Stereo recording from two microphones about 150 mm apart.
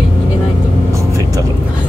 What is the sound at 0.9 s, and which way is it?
Vehicle, 20° right (ahead or behind).